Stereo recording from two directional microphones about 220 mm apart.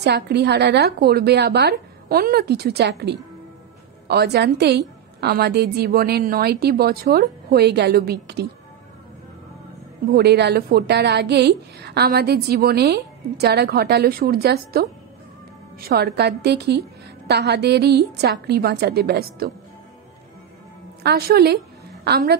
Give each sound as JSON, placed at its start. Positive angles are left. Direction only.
{"t": 0.0, "sound": "a woman's voice", "side_deg": -50}
{"t": 10.1, "sound": "a woman's voice", "side_deg": -50}
{"t": 21.0, "sound": "a woman's voice", "side_deg": -45}